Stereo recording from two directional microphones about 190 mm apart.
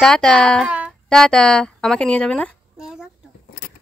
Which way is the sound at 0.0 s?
5° left (ahead or behind).